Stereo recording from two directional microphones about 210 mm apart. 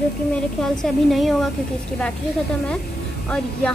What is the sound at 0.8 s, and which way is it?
Speech, centre (ahead or behind).